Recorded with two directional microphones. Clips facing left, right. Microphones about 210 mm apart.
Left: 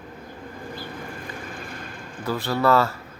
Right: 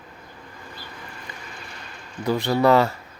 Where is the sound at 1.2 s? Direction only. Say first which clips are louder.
Left 5 dB; 50° left (ahead or behind).